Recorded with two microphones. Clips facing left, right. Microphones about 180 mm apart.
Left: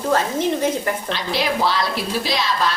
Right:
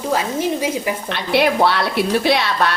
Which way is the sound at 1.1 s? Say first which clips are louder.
Right 8 dB; 60° right (ahead or behind).